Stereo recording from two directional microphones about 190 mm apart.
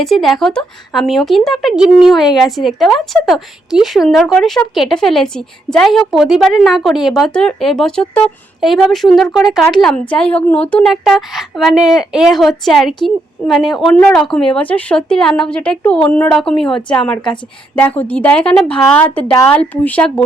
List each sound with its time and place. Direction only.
0.0 s a woman's voice: centre (ahead or behind)
19.0 s speech: 25° left (ahead or behind)
19.5 s a woman's voice: 10° left (ahead or behind)